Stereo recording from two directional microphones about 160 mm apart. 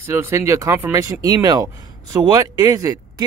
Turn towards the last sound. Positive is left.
turn(degrees=-20)  # may be behind; listen again after turning